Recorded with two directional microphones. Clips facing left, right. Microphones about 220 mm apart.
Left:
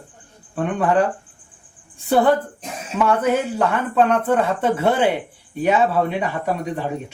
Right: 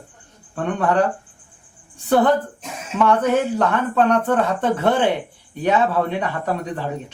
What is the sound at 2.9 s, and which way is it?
Speech, 10° left (ahead or behind).